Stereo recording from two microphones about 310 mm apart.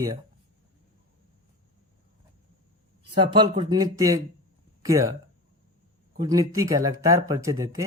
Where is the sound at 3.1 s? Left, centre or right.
Centre.